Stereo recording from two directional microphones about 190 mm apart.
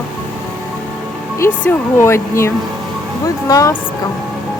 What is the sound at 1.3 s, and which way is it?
Speech, 10° left (ahead or behind).